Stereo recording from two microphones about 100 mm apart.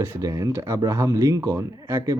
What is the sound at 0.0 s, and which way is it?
Speech, 30° right (ahead or behind).